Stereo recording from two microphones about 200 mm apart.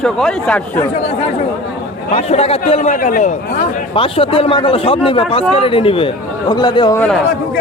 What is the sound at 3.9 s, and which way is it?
A man's voice, 25° left (ahead or behind).